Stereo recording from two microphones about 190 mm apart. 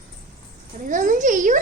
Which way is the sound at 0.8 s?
45° right (ahead or behind).